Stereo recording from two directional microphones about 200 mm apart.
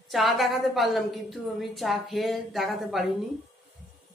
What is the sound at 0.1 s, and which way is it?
A woman's voice, centre (ahead or behind).